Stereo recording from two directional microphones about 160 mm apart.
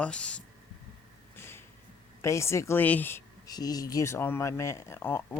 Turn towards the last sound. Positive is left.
turn(degrees=15)  # may be behind; listen again after turning